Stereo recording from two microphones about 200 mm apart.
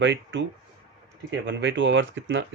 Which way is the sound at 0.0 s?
65° right (ahead or behind).